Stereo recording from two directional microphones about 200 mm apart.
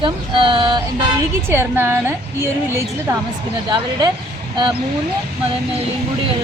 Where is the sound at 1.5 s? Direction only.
10° right (ahead or behind).